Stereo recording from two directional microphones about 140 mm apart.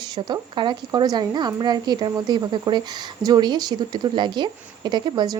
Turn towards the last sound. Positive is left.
turn(degrees=-30)  # may be behind; listen again after turning